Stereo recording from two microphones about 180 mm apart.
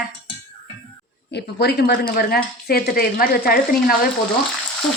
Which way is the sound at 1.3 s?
65° left (ahead or behind).